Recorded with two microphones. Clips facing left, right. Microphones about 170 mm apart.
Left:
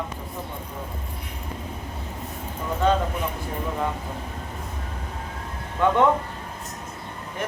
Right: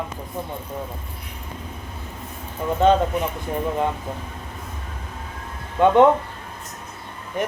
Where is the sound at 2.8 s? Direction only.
20° right (ahead or behind).